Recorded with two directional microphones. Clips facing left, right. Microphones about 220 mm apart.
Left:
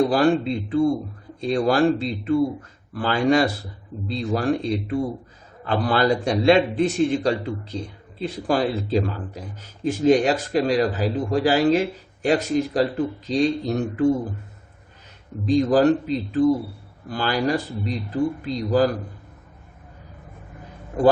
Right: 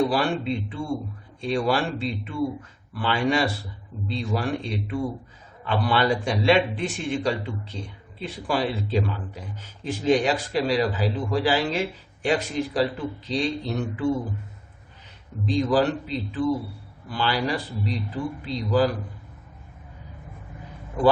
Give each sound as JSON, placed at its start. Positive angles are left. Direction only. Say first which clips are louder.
{"t": 0.0, "sound": "a man's voice", "louder": "left 5 dB", "side_deg": 40}
{"t": 15.4, "sound": "speech", "louder": "left 5 dB", "side_deg": 45}